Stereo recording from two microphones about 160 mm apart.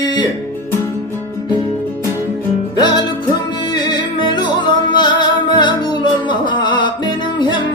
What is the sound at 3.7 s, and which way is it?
Music, 25° left (ahead or behind).